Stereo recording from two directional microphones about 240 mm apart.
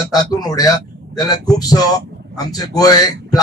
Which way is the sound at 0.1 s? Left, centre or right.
Centre.